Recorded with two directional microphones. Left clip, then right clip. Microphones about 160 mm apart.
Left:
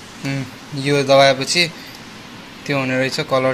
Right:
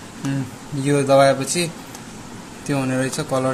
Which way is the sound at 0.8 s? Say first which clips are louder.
Left 2 dB; 10° right (ahead or behind).